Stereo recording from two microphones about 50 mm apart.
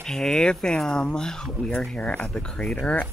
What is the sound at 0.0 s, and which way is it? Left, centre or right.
Speech, centre.